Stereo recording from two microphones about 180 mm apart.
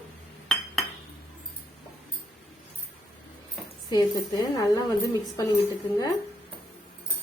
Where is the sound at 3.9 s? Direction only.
20° left (ahead or behind).